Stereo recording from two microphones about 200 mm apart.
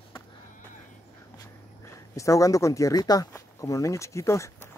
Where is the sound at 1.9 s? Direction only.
15° left (ahead or behind).